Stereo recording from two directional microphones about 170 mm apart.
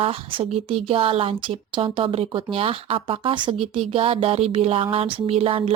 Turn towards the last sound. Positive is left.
turn(degrees=-35)  # may be behind; listen again after turning